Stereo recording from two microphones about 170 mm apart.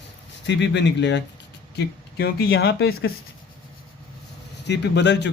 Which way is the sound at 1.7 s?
70° left (ahead or behind).